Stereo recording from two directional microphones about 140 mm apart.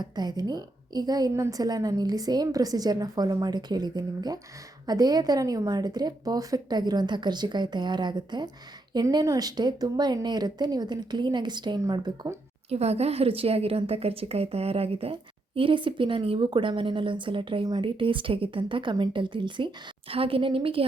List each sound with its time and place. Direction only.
0.0 s a woman's voice: 30° right (ahead or behind)
12.7 s a woman's voice: 45° right (ahead or behind)